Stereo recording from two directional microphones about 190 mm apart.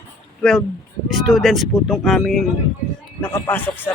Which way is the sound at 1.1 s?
Centre (ahead or behind).